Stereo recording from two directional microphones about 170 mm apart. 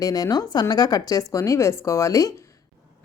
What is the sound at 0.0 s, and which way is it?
Speech, 20° left (ahead or behind).